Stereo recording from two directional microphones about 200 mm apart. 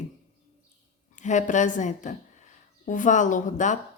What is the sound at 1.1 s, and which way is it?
Speech, 35° left (ahead or behind).